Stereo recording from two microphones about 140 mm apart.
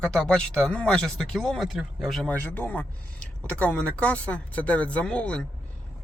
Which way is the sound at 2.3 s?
10° left (ahead or behind).